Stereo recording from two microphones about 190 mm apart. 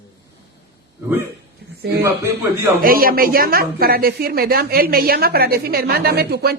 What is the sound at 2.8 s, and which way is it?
A woman's voice, 50° right (ahead or behind).